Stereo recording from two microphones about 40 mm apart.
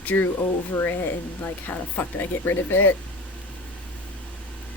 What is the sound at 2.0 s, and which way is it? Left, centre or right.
Speech, left.